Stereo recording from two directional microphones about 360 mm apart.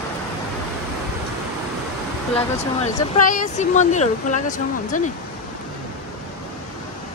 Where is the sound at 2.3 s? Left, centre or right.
Centre.